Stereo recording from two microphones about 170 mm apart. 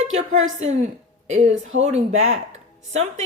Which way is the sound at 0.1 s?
45° right (ahead or behind).